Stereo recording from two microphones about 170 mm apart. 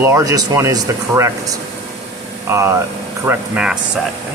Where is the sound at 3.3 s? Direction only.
5° right (ahead or behind).